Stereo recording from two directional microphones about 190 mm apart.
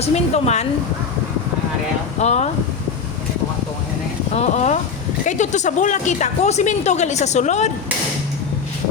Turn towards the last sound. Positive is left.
turn(degrees=35)  # may be behind; listen again after turning